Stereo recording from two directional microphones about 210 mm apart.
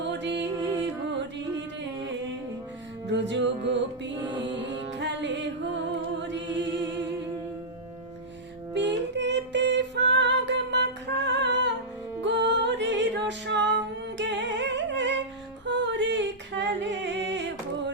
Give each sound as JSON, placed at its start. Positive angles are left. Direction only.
{"t": 0.0, "sound": "music", "side_deg": -55}
{"t": 3.1, "sound": "music", "side_deg": -55}
{"t": 8.7, "sound": "female singing", "side_deg": -55}
{"t": 12.2, "sound": "music", "side_deg": -55}